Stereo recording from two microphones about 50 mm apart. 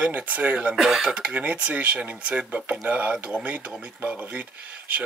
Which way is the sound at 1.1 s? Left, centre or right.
Right.